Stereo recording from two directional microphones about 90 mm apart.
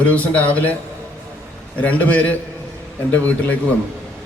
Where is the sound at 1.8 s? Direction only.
15° left (ahead or behind).